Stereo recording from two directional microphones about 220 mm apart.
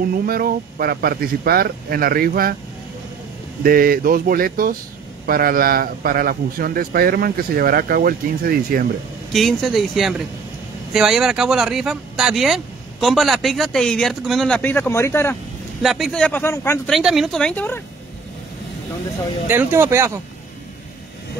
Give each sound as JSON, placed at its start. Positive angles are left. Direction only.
{"t": 0.2, "sound": "speech", "side_deg": -40}
{"t": 3.6, "sound": "a man's voice", "side_deg": -40}
{"t": 9.3, "sound": "speech", "side_deg": 0}
{"t": 15.8, "sound": "speech", "side_deg": 0}
{"t": 16.9, "sound": "speech", "side_deg": 0}
{"t": 19.4, "sound": "speech", "side_deg": -10}